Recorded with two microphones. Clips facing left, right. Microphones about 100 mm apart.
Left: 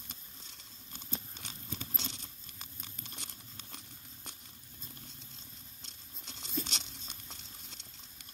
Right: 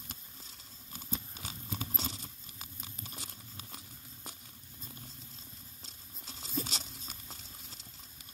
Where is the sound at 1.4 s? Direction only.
40° right (ahead or behind).